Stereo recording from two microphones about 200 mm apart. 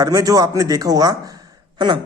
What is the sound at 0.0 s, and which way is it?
A man's voice, 20° right (ahead or behind).